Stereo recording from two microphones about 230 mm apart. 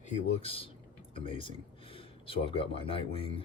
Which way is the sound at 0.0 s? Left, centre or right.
Left.